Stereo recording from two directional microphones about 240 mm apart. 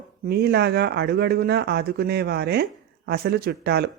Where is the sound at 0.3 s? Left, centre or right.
Right.